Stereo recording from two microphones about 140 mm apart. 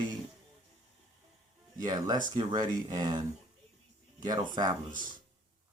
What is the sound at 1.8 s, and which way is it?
Speech, 30° right (ahead or behind).